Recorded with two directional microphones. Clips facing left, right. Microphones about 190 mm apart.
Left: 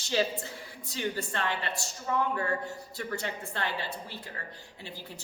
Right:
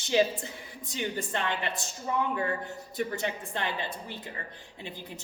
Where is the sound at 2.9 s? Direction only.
20° right (ahead or behind).